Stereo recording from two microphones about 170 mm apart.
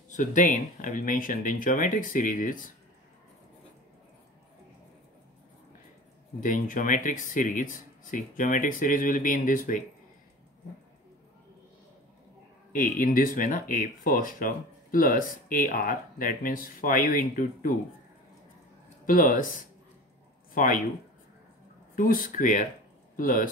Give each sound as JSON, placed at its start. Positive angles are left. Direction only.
{"t": 0.1, "sound": "speech", "side_deg": 45}
{"t": 6.4, "sound": "speech", "side_deg": 50}
{"t": 12.7, "sound": "speech", "side_deg": 55}
{"t": 19.0, "sound": "speech", "side_deg": 50}
{"t": 21.9, "sound": "speech", "side_deg": 55}